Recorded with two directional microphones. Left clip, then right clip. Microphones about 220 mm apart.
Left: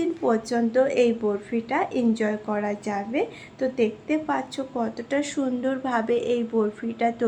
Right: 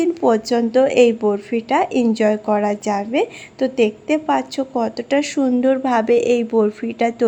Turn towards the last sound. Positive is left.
turn(degrees=-35)  # may be behind; listen again after turning